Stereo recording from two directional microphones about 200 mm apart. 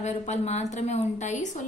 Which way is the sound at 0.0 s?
35° left (ahead or behind).